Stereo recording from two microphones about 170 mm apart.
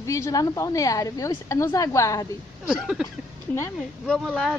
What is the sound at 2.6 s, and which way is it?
Speech, 5° right (ahead or behind).